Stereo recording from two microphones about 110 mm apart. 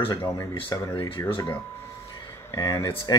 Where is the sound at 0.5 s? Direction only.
50° left (ahead or behind).